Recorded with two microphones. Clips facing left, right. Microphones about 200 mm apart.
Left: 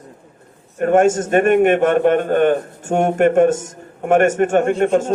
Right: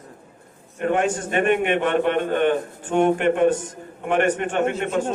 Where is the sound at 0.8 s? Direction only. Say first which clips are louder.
Left 8 dB; 45° left (ahead or behind).